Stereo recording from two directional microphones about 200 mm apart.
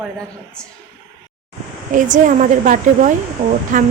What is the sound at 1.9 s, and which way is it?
Speech, 40° right (ahead or behind).